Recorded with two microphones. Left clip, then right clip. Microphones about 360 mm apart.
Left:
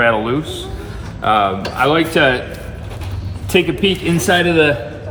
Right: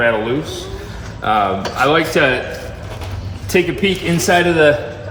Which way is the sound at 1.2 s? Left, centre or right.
Centre.